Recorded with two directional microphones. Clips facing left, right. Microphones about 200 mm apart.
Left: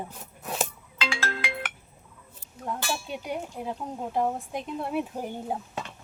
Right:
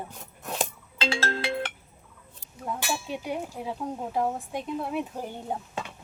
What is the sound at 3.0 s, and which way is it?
Speech, centre (ahead or behind).